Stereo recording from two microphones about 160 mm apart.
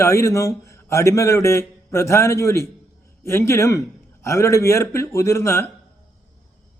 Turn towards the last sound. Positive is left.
turn(degrees=15)  # may be behind; listen again after turning